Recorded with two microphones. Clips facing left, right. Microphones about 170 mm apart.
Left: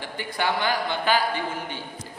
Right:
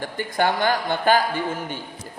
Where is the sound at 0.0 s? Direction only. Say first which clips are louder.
Right 5 dB; 45° right (ahead or behind).